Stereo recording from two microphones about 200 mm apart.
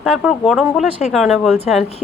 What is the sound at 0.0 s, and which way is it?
A woman's voice, centre (ahead or behind).